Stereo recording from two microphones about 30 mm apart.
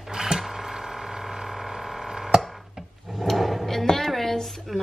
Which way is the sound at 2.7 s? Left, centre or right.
Centre.